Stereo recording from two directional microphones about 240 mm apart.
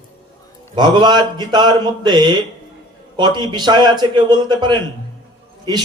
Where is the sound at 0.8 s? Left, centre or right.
Centre.